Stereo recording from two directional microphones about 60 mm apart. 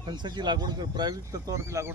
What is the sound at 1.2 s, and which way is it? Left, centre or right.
Speech, right.